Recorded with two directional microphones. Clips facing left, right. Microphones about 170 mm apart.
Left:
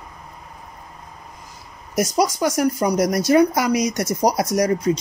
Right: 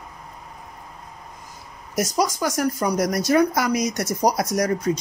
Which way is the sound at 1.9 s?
20° left (ahead or behind).